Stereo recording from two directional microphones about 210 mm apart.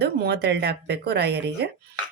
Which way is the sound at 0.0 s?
50° right (ahead or behind).